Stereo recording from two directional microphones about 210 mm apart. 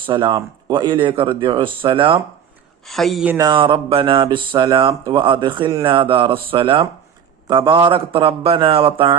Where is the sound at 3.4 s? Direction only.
20° right (ahead or behind).